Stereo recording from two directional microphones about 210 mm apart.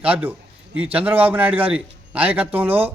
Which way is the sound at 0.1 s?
10° right (ahead or behind).